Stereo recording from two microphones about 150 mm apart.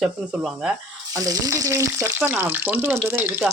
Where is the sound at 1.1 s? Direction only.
20° right (ahead or behind).